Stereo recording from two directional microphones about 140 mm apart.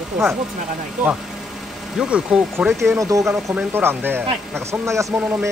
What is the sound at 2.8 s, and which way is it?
Speech, 20° right (ahead or behind).